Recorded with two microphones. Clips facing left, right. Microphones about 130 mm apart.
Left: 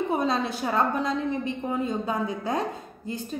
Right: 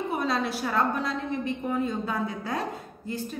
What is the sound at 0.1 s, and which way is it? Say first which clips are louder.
A woman's voice: left 2 dB; 20° left (ahead or behind).